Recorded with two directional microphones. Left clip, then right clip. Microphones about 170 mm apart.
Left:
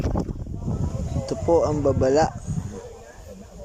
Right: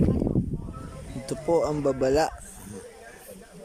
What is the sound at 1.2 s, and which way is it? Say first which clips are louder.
Speech: left 4 dB; centre (ahead or behind).